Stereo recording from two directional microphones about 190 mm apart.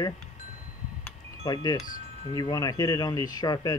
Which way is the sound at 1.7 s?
45° left (ahead or behind).